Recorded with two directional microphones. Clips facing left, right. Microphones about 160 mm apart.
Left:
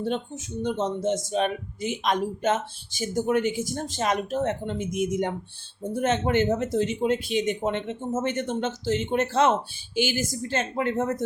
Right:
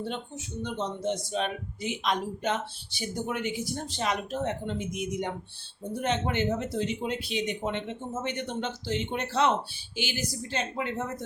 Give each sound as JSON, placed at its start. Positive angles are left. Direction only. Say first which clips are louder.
{"t": 0.0, "sound": "speech", "louder": "left 6 dB", "side_deg": 40}